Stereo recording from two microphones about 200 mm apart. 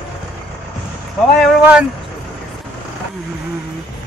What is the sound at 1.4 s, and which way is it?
Speech, 5° right (ahead or behind).